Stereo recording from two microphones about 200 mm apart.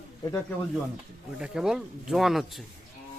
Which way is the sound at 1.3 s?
5° right (ahead or behind).